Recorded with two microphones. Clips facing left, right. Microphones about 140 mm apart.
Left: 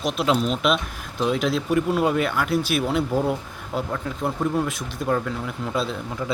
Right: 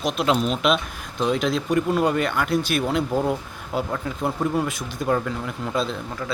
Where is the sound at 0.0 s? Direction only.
Centre (ahead or behind).